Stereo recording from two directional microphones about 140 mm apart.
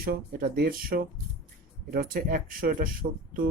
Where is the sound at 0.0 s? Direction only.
90° right.